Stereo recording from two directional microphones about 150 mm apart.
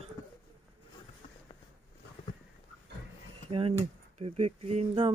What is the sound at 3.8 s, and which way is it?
Speech, 40° right (ahead or behind).